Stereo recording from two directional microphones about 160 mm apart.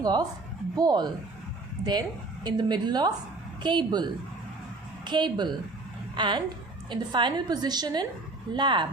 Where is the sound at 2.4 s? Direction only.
25° right (ahead or behind).